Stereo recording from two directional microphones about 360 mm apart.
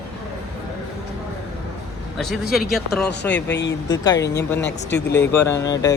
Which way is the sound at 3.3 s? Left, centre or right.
Left.